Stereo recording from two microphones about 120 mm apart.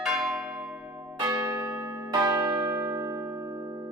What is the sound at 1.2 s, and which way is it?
Church bell, 25° right (ahead or behind).